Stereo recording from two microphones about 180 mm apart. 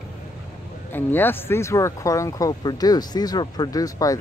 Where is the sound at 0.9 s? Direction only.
10° left (ahead or behind).